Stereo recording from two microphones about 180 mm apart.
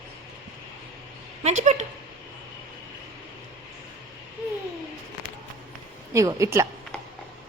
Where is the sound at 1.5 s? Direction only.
40° right (ahead or behind).